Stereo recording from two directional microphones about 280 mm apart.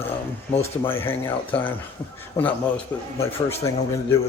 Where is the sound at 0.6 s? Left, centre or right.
Centre.